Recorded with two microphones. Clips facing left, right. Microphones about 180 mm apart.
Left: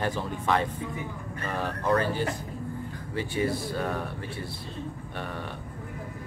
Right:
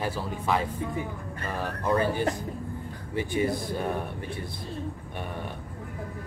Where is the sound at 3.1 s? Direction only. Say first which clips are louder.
Right 1 dB; 15° right (ahead or behind).